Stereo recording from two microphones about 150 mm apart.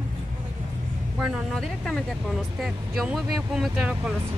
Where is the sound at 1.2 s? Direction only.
5° right (ahead or behind).